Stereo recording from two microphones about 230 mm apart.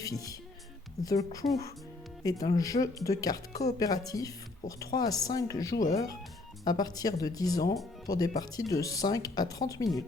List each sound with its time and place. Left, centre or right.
0.0 s speech: centre